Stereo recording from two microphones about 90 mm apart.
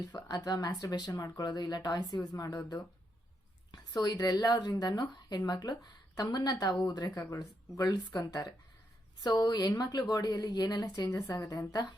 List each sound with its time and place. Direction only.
0.0 s speech: 50° left (ahead or behind)
9.2 s a woman's voice: 50° left (ahead or behind)